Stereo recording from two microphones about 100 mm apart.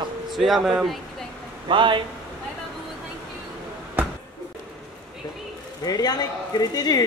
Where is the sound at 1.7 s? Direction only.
55° right (ahead or behind).